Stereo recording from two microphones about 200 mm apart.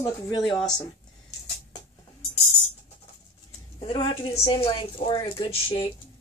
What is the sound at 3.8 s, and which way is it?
A woman's voice, 25° left (ahead or behind).